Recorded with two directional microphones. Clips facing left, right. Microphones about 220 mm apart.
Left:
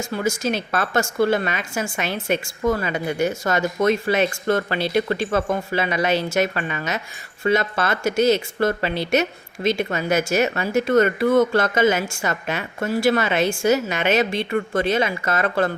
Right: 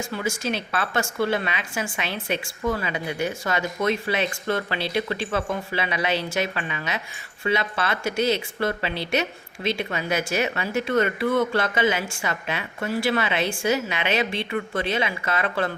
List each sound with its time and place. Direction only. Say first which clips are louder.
0.1 s speech: left 7 dB; 45° left (ahead or behind)